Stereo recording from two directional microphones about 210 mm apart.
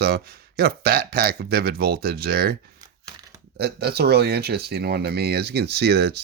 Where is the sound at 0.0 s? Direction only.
45° right (ahead or behind).